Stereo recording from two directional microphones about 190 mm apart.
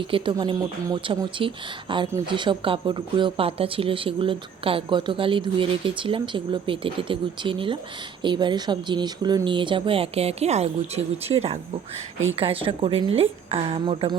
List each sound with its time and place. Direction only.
0.0 s speech: 25° right (ahead or behind)